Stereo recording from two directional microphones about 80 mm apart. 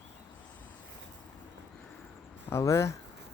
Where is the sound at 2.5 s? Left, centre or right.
Left.